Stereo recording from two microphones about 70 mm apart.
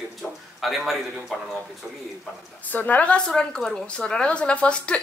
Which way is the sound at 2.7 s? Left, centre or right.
Left.